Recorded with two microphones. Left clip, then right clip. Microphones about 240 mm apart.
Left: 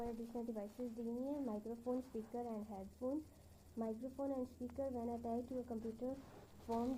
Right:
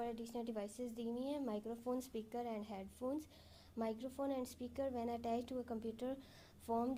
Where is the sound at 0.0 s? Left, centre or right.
Right.